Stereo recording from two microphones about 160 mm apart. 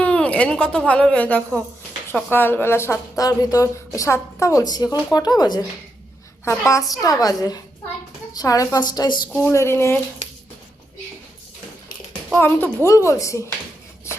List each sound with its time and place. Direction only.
0.0 s a woman's voice: 5° left (ahead or behind)
12.3 s a woman's voice: 10° left (ahead or behind)